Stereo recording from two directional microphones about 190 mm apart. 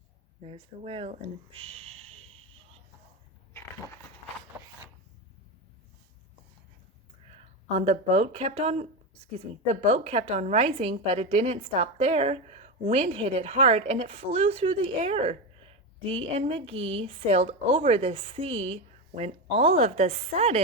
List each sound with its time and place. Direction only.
0.4 s a woman's voice: 30° right (ahead or behind)
1.5 s a sound: 30° right (ahead or behind)
7.7 s a woman's voice: 35° right (ahead or behind)